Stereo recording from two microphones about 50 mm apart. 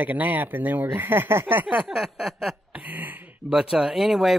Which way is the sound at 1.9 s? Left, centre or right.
Centre.